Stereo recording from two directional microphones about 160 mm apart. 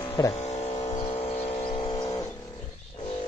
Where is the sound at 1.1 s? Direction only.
40° left (ahead or behind).